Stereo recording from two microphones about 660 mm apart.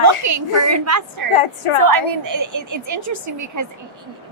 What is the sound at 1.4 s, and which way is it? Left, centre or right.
Speech, left.